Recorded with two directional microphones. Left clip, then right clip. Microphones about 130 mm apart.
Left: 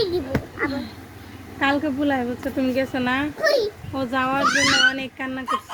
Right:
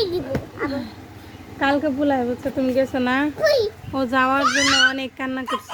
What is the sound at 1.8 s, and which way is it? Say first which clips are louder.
Speech: right 2 dB; 15° right (ahead or behind).